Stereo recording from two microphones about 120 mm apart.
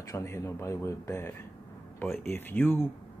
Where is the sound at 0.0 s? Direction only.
25° left (ahead or behind).